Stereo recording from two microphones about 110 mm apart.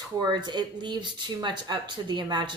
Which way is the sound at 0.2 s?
40° right (ahead or behind).